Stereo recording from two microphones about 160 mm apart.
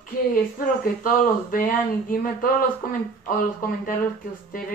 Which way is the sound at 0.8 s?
60° left (ahead or behind).